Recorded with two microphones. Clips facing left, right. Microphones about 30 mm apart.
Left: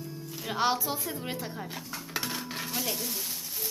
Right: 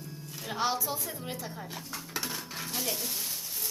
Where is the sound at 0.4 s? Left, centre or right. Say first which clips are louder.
Left 3 dB; centre.